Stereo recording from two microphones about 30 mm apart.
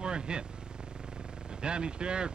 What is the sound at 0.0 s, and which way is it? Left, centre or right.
Vehicle, right.